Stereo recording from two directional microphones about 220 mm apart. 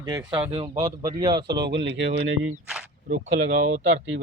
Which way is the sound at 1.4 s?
50° right (ahead or behind).